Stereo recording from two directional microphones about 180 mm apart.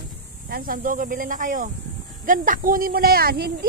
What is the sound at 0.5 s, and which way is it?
Speech, 55° right (ahead or behind).